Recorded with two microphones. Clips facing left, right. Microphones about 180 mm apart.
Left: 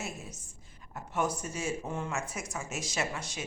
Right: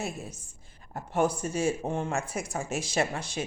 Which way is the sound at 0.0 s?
30° right (ahead or behind).